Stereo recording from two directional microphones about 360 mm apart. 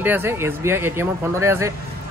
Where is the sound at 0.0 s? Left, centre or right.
Centre.